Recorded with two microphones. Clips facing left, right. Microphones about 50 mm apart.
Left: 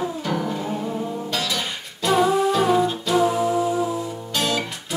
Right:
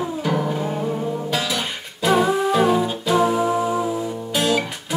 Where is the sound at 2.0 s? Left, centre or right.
Centre.